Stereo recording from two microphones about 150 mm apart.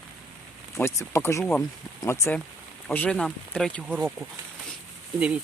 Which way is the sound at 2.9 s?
5° left (ahead or behind).